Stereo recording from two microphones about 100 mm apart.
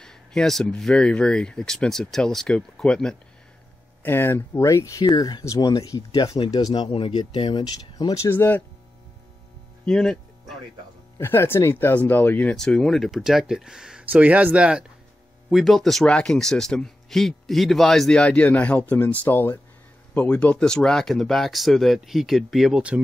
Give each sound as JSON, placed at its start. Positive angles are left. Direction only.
{"t": 0.0, "sound": "speech", "side_deg": 5}
{"t": 4.0, "sound": "speech", "side_deg": 20}
{"t": 6.7, "sound": "speech", "side_deg": 60}
{"t": 9.8, "sound": "speech", "side_deg": 5}
{"t": 11.1, "sound": "speech", "side_deg": 25}
{"t": 12.5, "sound": "speech", "side_deg": 5}